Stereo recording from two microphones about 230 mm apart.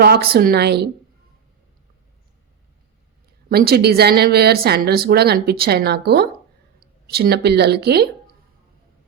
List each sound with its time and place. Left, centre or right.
0.0 s speech: right
3.5 s speech: right